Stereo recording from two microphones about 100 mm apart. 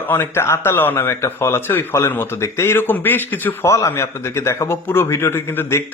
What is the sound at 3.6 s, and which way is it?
Speech, 30° left (ahead or behind).